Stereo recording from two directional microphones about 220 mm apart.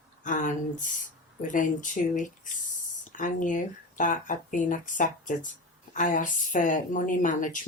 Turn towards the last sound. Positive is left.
turn(degrees=35)  # may be behind; listen again after turning